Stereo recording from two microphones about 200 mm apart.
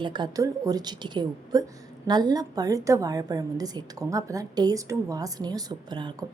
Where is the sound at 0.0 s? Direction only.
20° right (ahead or behind).